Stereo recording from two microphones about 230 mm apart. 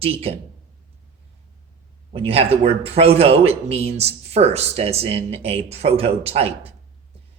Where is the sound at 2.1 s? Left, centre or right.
Right.